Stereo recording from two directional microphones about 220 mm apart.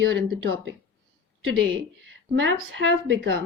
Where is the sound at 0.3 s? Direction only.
60° right (ahead or behind).